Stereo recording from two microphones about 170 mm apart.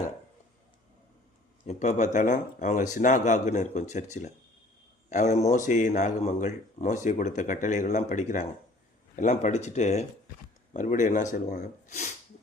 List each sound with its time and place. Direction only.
1.6 s speech: 45° left (ahead or behind)
5.0 s speech: 45° left (ahead or behind)